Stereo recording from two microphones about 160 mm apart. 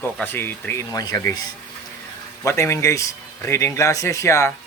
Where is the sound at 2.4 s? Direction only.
20° left (ahead or behind).